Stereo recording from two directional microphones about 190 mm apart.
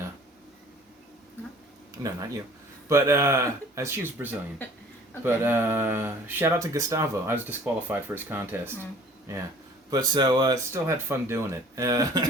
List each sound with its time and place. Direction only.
2.9 s speech: 15° right (ahead or behind)